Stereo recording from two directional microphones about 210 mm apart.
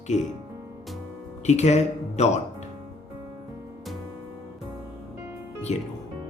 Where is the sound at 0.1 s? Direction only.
35° left (ahead or behind).